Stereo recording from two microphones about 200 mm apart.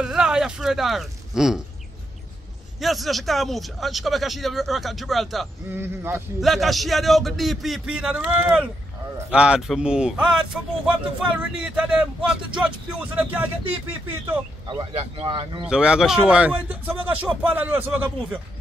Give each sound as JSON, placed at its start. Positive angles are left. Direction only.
{"t": 0.0, "sound": "speech", "side_deg": -5}
{"t": 2.8, "sound": "a man's voice", "side_deg": 0}
{"t": 5.7, "sound": "speech", "side_deg": -10}
{"t": 6.4, "sound": "a man's voice", "side_deg": 0}
{"t": 14.7, "sound": "speech", "side_deg": -25}
{"t": 15.6, "sound": "speech", "side_deg": -5}